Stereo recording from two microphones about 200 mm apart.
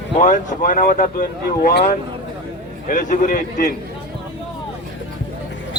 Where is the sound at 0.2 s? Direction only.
40° left (ahead or behind).